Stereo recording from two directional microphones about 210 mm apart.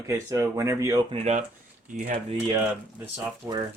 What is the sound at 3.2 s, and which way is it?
Speech, 15° right (ahead or behind).